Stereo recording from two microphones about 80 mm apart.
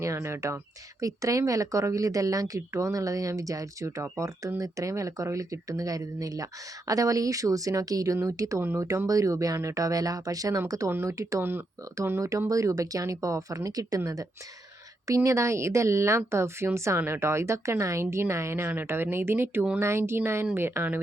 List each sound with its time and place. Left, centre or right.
0.0 s speech: right
1.0 s speech: right
12.5 s speech: right